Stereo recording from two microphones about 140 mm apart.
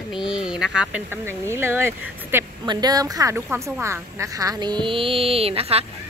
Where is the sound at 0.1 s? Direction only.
5° right (ahead or behind).